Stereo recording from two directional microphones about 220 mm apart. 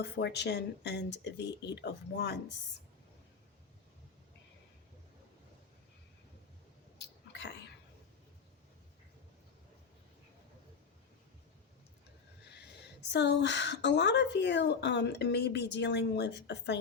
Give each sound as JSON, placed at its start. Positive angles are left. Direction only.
{"t": 0.0, "sound": "a woman's voice", "side_deg": 50}
{"t": 7.0, "sound": "a sound", "side_deg": 50}
{"t": 12.5, "sound": "a woman's voice", "side_deg": 50}